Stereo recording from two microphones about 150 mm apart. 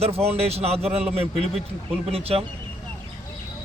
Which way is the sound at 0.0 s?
45° right (ahead or behind).